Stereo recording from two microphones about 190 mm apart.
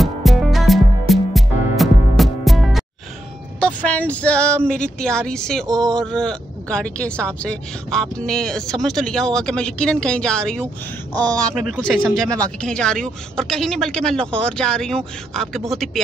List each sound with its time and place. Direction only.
0.0 s music: centre (ahead or behind)
3.5 s speech: 5° left (ahead or behind)
11.1 s speech: 20° right (ahead or behind)
11.4 s speech: centre (ahead or behind)